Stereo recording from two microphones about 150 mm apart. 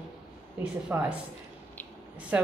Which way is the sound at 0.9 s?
15° right (ahead or behind).